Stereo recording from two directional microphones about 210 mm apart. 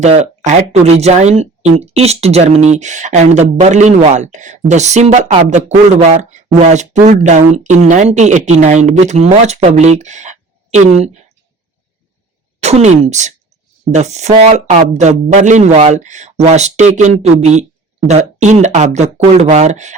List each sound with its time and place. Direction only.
0.0 s speech: 35° right (ahead or behind)
12.5 s speech: 30° right (ahead or behind)